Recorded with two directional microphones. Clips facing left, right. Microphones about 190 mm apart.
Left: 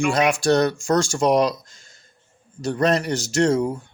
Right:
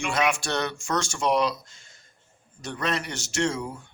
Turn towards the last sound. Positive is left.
turn(degrees=40)  # may be behind; listen again after turning